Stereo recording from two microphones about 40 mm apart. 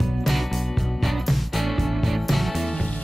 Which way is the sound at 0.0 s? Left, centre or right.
Centre.